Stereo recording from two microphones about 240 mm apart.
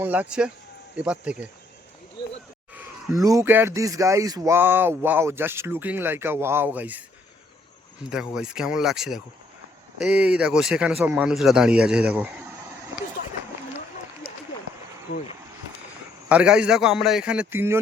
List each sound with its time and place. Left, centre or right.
0.0 s speech: centre
2.7 s speech: centre
8.1 s speech: centre
15.1 s speech: left
16.3 s speech: centre